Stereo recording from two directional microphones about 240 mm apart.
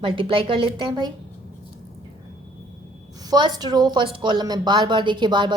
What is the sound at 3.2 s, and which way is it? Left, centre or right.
Speech, centre.